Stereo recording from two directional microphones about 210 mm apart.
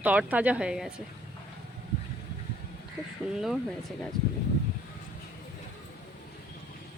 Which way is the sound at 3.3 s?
Centre (ahead or behind).